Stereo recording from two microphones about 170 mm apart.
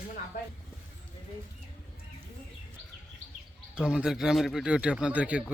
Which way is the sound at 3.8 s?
5° right (ahead or behind).